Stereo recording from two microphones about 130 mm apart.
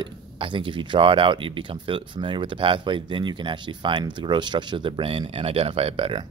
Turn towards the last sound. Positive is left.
turn(degrees=-45)  # may be behind; listen again after turning